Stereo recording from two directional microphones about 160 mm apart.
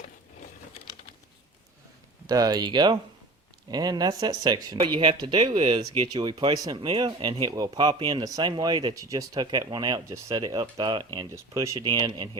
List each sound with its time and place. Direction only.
2.2 s speech: 25° right (ahead or behind)
11.3 s speech: 20° right (ahead or behind)